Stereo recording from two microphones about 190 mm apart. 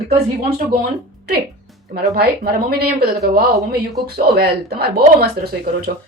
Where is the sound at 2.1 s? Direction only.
55° right (ahead or behind).